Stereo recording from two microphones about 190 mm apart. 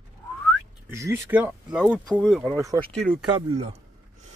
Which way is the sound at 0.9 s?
15° right (ahead or behind).